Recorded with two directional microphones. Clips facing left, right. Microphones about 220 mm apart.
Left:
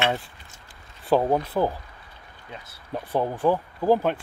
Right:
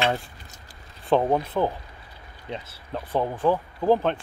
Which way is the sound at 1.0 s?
5° left (ahead or behind).